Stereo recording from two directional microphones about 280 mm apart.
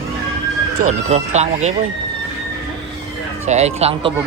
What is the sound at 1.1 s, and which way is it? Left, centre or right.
Speech, right.